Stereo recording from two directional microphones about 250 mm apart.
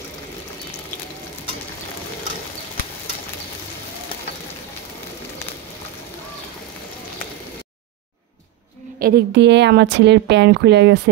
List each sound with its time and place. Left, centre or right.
9.0 s a woman's voice: right